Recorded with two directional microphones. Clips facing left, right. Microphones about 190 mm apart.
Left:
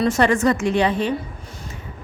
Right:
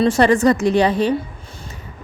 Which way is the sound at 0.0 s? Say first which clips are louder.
Right 4 dB; 35° right (ahead or behind).